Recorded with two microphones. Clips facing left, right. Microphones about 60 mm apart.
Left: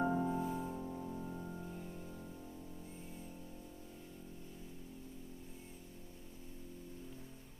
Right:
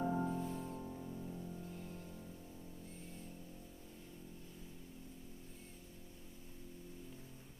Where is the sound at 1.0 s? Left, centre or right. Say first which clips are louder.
Left 3 dB; left.